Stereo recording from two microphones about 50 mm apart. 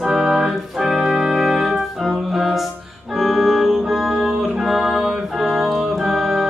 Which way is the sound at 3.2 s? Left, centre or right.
Centre.